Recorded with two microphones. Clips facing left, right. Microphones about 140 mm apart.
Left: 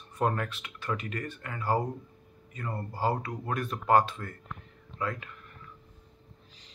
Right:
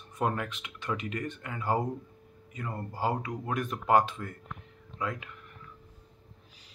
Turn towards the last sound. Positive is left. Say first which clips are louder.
# left 1 dB
turn(degrees=-15)  # may be behind; listen again after turning